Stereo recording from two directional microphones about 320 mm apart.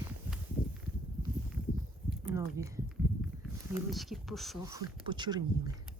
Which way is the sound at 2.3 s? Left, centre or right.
Centre.